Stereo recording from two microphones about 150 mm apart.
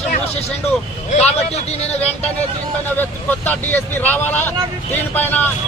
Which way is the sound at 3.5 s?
10° left (ahead or behind).